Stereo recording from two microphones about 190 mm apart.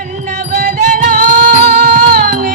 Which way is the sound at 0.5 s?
50° right (ahead or behind).